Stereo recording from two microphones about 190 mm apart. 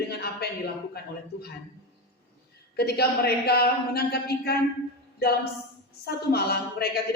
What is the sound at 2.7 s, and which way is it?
A woman's voice, 55° left (ahead or behind).